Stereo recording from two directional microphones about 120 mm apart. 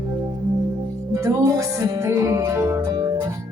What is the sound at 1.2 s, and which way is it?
Music, 25° right (ahead or behind).